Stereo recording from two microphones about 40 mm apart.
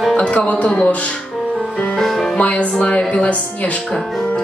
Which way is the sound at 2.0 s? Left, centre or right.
Centre.